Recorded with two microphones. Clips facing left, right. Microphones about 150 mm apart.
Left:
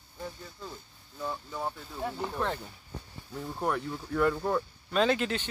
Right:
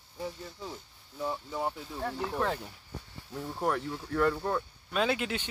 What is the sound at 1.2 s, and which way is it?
Speech, 10° right (ahead or behind).